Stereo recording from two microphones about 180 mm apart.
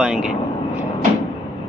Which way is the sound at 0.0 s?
5° right (ahead or behind).